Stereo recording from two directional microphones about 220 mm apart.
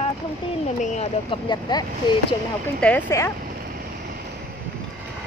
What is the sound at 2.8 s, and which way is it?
Speech, 10° left (ahead or behind).